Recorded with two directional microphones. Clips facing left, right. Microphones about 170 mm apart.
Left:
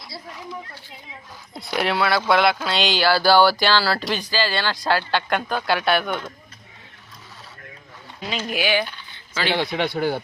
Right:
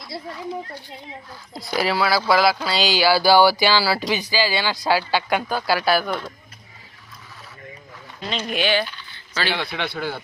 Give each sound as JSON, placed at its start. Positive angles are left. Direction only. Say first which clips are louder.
{"t": 1.5, "sound": "speech", "louder": "right 1 dB", "side_deg": 0}
{"t": 8.2, "sound": "speech", "louder": "right 1 dB", "side_deg": 5}